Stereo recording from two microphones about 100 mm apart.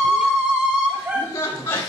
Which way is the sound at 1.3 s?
25° left (ahead or behind).